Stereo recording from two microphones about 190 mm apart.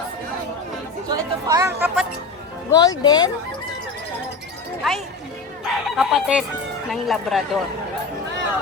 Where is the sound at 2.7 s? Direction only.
20° left (ahead or behind).